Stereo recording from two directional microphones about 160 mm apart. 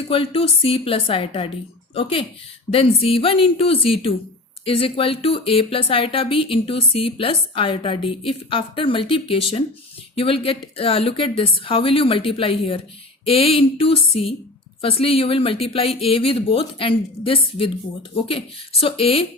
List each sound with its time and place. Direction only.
0.1 s speech: 35° left (ahead or behind)